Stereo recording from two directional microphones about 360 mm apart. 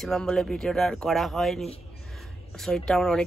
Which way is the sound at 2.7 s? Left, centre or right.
Centre.